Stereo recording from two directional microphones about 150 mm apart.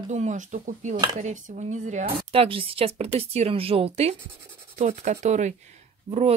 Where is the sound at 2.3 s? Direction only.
35° right (ahead or behind).